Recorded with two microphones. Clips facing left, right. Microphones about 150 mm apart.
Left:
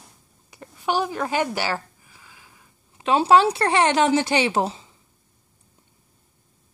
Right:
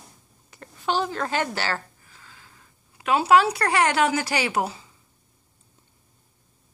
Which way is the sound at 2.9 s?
25° left (ahead or behind).